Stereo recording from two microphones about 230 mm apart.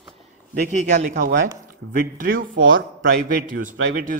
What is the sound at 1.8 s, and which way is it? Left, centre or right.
Speech, right.